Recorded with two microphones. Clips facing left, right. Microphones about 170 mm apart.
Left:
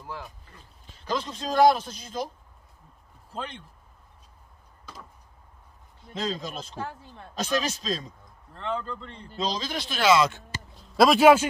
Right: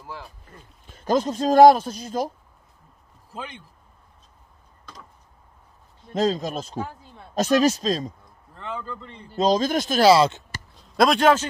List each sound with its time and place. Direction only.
0.0 s speech: 5° right (ahead or behind)
0.5 s speech: 45° right (ahead or behind)
3.3 s speech: 5° right (ahead or behind)
6.1 s speech: 45° right (ahead or behind)
8.5 s speech: 5° right (ahead or behind)
9.3 s speech: 45° right (ahead or behind)
11.0 s speech: 5° left (ahead or behind)